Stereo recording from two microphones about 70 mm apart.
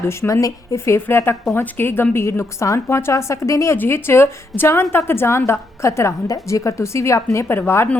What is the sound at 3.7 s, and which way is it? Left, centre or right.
A woman's voice, left.